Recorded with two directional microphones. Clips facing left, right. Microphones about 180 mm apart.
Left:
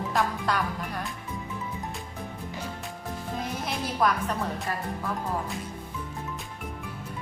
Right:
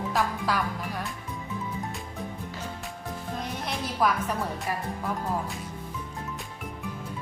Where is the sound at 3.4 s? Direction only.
Centre (ahead or behind).